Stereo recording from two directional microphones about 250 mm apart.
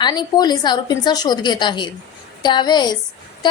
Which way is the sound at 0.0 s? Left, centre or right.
Centre.